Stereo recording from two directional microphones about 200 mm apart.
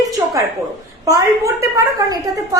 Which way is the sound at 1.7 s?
15° right (ahead or behind).